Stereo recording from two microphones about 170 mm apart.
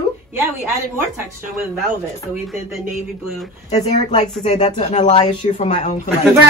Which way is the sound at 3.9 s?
40° left (ahead or behind).